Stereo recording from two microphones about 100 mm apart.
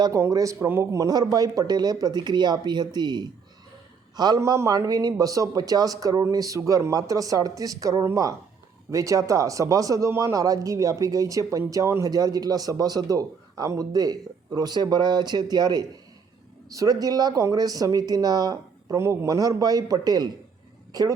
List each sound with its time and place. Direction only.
0.0 s a man's voice: 35° right (ahead or behind)
4.4 s a man's voice: 30° right (ahead or behind)